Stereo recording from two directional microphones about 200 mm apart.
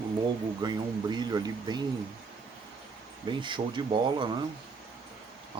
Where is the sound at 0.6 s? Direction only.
20° right (ahead or behind).